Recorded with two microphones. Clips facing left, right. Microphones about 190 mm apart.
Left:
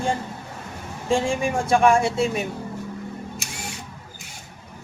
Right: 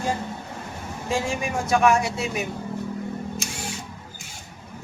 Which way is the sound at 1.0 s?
30° left (ahead or behind).